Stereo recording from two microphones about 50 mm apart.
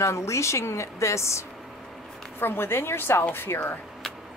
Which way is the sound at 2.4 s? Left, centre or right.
Left.